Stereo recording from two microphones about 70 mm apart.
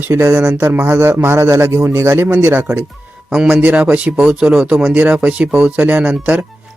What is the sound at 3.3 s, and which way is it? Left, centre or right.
Speech, centre.